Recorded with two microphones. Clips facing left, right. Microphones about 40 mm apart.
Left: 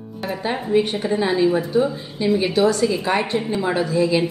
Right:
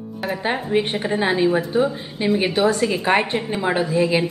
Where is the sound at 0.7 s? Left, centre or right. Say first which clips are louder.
Left 4 dB; right.